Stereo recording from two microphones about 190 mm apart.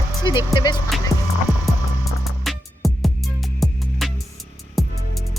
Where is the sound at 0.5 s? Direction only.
20° left (ahead or behind).